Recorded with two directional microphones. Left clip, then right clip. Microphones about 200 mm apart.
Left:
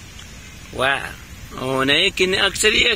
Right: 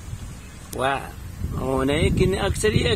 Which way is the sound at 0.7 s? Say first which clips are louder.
Left 4 dB; centre (ahead or behind).